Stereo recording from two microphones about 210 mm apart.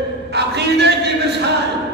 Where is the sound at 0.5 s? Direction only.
55° right (ahead or behind).